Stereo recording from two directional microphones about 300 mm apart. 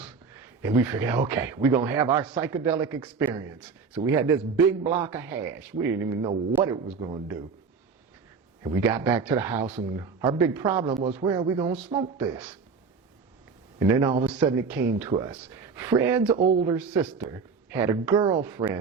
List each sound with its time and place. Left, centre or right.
0.9 s speech: centre
4.8 s speech: right
5.0 s speech: centre
8.6 s speech: centre
9.0 s speech: right
13.7 s speech: centre